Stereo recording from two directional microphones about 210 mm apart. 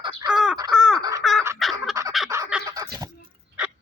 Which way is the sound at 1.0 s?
15° right (ahead or behind).